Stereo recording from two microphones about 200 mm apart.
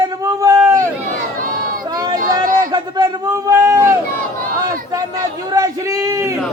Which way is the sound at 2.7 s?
20° right (ahead or behind).